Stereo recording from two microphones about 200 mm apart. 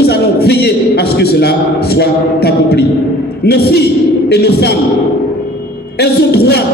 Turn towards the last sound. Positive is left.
turn(degrees=55)  # may be behind; listen again after turning